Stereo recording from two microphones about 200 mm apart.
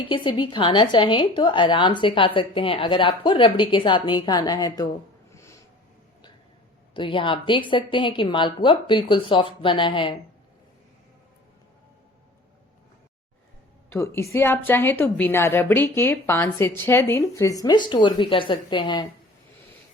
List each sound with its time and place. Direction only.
0.0 s speech: 25° left (ahead or behind)
5.3 s snort: 15° left (ahead or behind)
6.9 s speech: 25° left (ahead or behind)
13.9 s a woman's voice: 15° left (ahead or behind)